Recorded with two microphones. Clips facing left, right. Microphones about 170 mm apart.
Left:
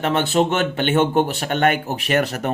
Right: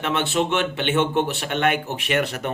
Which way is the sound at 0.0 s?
40° left (ahead or behind).